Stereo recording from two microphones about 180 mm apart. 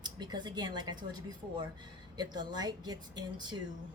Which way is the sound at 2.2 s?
25° right (ahead or behind).